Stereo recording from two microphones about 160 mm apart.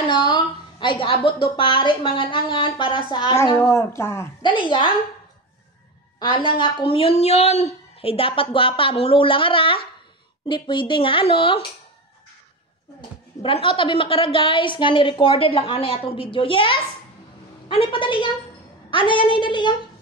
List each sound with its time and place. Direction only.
0.1 s a woman's voice: 30° left (ahead or behind)
3.3 s speech: 15° left (ahead or behind)
4.4 s a woman's voice: 30° left (ahead or behind)
6.1 s a woman's voice: 30° left (ahead or behind)
13.4 s a woman's voice: 35° left (ahead or behind)